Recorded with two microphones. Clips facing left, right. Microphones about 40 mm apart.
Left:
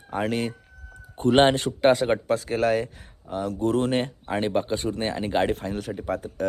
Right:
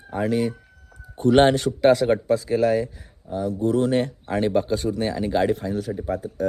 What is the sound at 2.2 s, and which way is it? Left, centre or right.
Speech, left.